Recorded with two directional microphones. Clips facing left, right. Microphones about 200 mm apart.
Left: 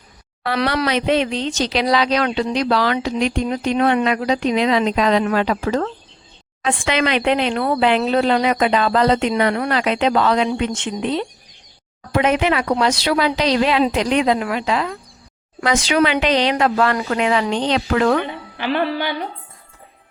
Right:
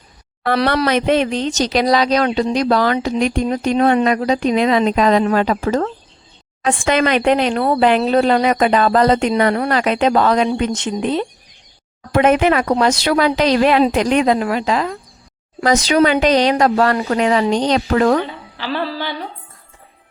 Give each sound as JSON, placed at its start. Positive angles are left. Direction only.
{"t": 0.4, "sound": "speech", "side_deg": -40}
{"t": 0.9, "sound": "speech", "side_deg": -50}
{"t": 18.5, "sound": "a woman's voice", "side_deg": 20}